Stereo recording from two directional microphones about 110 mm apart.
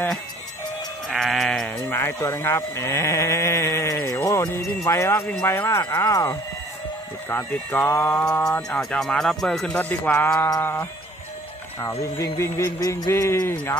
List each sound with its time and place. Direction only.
1.0 s sheep: centre (ahead or behind)
1.9 s speech: 20° left (ahead or behind)
8.7 s speech: 10° left (ahead or behind)